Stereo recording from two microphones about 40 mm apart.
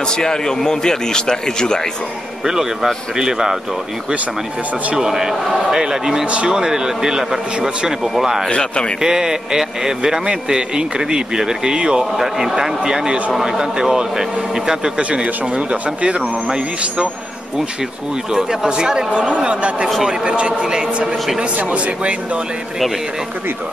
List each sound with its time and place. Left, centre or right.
0.1 s a man's voice: centre
2.4 s speech: centre
4.9 s speech: centre
8.5 s speech: left
9.0 s speech: centre
12.0 s speech: centre
15.0 s a man's voice: right
18.3 s a man's voice: centre
20.6 s speech: centre
21.5 s speech: right